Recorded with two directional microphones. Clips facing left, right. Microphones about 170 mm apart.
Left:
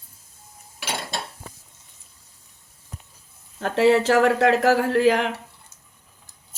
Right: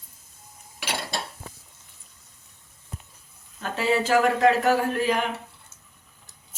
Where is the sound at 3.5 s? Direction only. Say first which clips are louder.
Left 7 dB; 75° left (ahead or behind).